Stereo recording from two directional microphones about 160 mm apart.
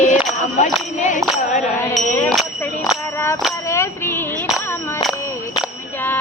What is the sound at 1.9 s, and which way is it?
Music, 5° left (ahead or behind).